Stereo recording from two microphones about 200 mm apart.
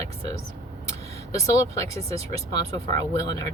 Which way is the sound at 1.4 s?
15° left (ahead or behind).